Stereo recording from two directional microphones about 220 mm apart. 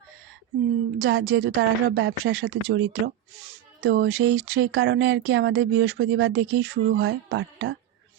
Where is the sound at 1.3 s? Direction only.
70° right (ahead or behind).